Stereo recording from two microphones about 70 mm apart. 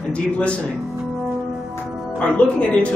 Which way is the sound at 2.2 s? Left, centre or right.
Centre.